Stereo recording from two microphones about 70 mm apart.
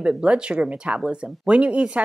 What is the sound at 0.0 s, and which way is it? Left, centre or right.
Speech, centre.